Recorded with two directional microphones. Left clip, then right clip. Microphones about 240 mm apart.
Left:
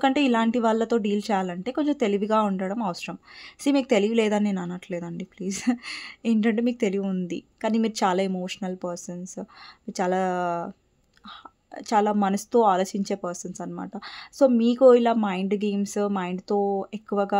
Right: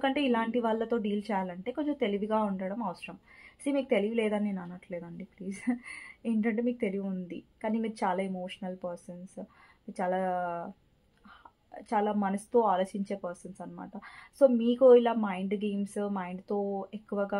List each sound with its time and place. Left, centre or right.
0.0 s speech: left
11.7 s speech: left